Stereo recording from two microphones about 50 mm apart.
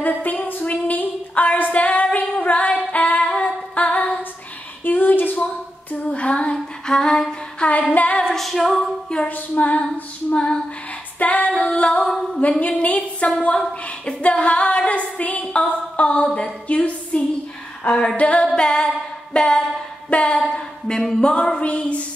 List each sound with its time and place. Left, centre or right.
0.0 s a sound: left
2.9 s music: left
4.8 s female singing: left; by 7.3 s centre
7.6 s female singing: left
8.2 s female singing: centre
9.3 s female singing: left
12.4 s a sound: left
17.8 s female singing: centre
18.1 s music: left
18.5 s a sound: centre